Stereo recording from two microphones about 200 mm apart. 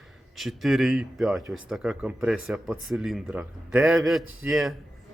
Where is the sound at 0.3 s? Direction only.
Centre (ahead or behind).